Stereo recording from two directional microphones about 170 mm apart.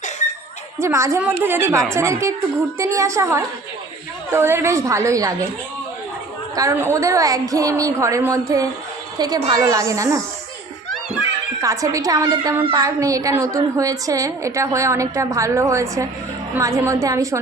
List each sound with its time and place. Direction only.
0.8 s a woman's voice: 15° right (ahead or behind)
6.6 s a woman's voice: 15° right (ahead or behind)
11.6 s a woman's voice: 20° right (ahead or behind)